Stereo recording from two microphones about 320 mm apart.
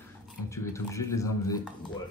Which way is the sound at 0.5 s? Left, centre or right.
Centre.